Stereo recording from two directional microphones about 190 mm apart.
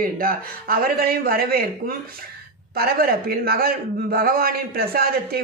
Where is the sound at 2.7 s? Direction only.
55° right (ahead or behind).